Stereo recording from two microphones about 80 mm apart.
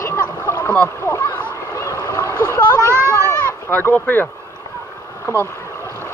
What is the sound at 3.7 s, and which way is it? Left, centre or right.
Speech, left.